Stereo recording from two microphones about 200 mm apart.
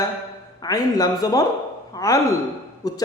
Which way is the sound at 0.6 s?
20° left (ahead or behind).